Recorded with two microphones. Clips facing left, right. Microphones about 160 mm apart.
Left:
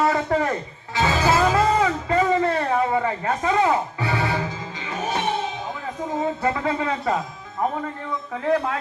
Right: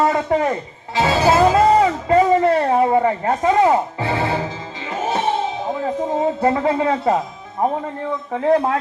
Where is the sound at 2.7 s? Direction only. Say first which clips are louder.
Right 6 dB; 35° right (ahead or behind).